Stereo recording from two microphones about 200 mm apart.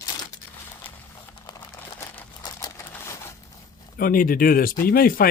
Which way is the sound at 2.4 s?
20° left (ahead or behind).